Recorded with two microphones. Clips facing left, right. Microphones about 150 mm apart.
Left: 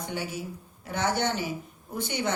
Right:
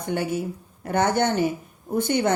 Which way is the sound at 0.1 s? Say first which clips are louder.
Right 12 dB; 55° right (ahead or behind).